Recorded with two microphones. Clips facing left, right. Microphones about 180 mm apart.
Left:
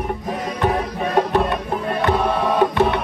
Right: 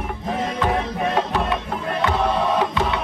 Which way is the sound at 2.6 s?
55° left (ahead or behind).